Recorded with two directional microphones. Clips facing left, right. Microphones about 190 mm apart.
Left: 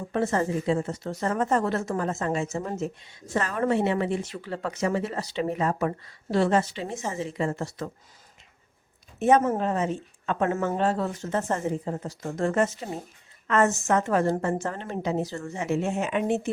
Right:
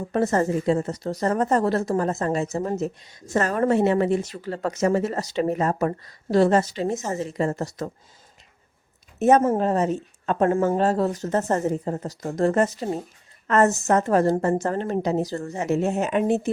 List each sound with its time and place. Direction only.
0.1 s a woman's voice: 40° right (ahead or behind)
9.1 s a woman's voice: 40° right (ahead or behind)